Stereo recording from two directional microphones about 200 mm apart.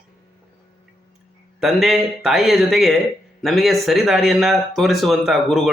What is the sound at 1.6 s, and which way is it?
Speech, centre (ahead or behind).